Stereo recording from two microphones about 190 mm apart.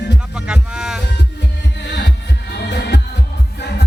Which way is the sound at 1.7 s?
60° left (ahead or behind).